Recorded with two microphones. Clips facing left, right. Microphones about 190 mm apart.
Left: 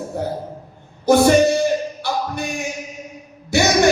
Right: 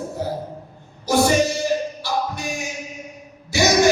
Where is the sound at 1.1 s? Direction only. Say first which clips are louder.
Left 5 dB; 60° left (ahead or behind).